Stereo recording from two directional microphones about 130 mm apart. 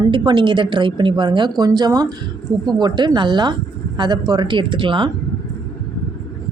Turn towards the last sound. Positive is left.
turn(degrees=-40)  # may be behind; listen again after turning